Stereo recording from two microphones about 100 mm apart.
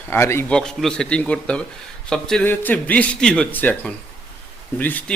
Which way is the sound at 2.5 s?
15° left (ahead or behind).